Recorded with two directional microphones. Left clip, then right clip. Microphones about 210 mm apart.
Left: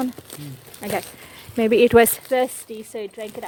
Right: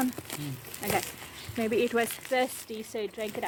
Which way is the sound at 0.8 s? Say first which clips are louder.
Left 4 dB; 40° left (ahead or behind).